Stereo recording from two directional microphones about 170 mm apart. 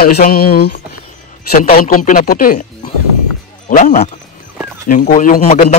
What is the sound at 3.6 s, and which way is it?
A man's voice, 50° left (ahead or behind).